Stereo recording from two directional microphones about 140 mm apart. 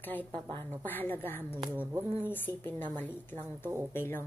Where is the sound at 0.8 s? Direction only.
15° left (ahead or behind).